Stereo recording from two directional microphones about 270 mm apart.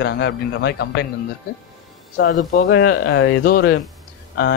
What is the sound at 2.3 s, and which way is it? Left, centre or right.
Speech, left.